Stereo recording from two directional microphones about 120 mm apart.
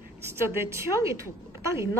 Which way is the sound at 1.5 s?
20° right (ahead or behind).